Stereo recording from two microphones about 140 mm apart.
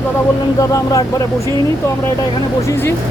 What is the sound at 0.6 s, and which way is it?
Speech, 25° left (ahead or behind).